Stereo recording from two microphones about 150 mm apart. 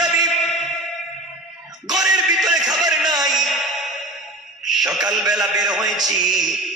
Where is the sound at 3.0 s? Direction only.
25° right (ahead or behind).